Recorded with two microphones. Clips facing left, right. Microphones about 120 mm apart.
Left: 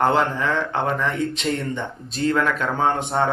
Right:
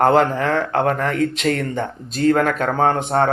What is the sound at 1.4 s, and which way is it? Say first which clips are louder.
Speech: right 4 dB; 80° right.